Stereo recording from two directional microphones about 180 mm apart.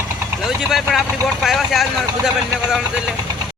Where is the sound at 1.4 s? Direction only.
Centre (ahead or behind).